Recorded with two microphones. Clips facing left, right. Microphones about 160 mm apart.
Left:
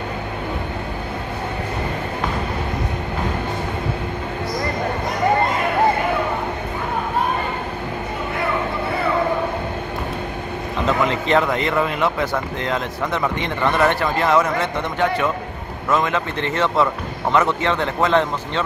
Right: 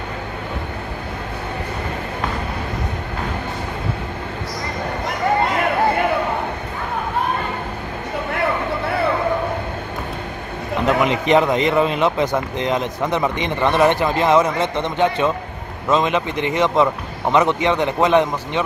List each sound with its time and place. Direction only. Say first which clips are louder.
10.9 s a man's voice: right 3 dB; 20° right (ahead or behind)